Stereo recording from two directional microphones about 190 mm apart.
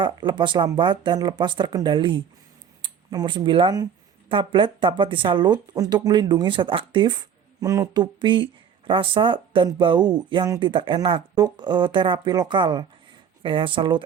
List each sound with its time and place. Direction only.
0.0 s speech: 25° right (ahead or behind)